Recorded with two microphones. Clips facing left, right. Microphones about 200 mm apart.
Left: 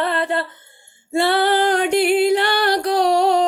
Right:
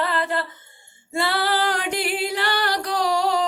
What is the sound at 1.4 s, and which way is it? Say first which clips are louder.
Music: left 7 dB; 55° left (ahead or behind).